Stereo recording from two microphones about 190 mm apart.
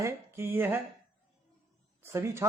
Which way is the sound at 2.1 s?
15° right (ahead or behind).